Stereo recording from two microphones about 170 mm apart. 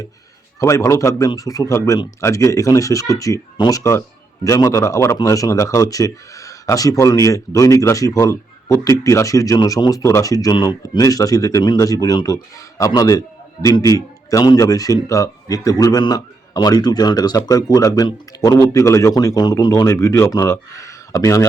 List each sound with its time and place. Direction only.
0.6 s speech: 15° left (ahead or behind)